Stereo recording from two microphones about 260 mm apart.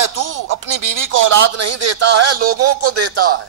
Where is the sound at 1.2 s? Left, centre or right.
Right.